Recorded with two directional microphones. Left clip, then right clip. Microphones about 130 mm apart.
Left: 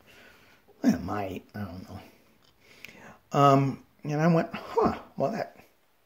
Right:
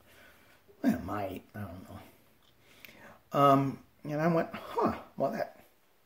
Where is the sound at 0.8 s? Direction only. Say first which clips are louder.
Left 4 dB; 40° left (ahead or behind).